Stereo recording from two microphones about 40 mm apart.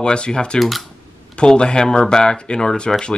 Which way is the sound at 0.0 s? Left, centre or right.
Left.